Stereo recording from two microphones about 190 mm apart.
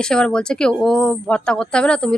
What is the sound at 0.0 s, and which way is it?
Speech, 5° left (ahead or behind).